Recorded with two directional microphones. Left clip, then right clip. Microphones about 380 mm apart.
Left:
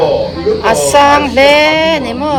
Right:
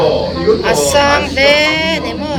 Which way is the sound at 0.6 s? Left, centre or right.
Centre.